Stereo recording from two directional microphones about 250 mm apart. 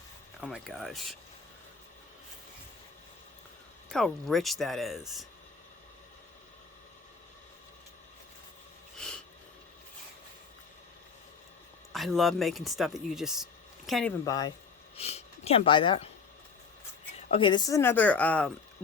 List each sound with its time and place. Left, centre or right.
0.4 s speech: centre
3.8 s speech: centre
11.9 s speech: centre
14.3 s speech: centre
14.9 s speech: left
17.2 s speech: left; by 18.5 s centre